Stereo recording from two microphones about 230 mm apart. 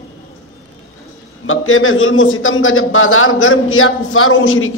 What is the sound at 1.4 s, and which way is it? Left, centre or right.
A man's voice, left.